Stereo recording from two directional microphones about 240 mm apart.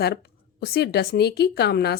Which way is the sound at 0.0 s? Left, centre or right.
Left.